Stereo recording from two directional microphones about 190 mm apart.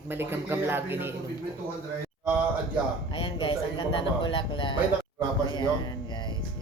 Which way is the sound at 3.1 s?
30° left (ahead or behind).